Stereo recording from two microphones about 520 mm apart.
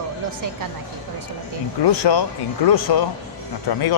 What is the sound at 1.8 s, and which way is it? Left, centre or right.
A man's voice, left.